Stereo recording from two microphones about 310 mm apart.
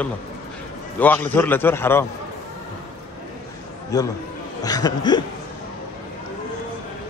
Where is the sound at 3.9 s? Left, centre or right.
Centre.